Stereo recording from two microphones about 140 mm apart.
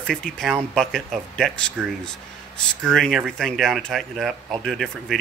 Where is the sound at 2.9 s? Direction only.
Centre (ahead or behind).